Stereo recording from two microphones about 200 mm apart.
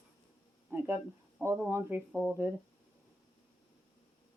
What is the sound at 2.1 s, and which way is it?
Speech, 10° left (ahead or behind).